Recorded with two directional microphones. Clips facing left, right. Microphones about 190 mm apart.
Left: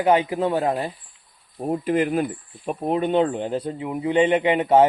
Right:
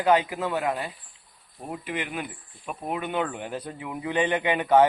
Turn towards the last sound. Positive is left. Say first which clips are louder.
# left 4 dB
turn(degrees=25)  # may be behind; listen again after turning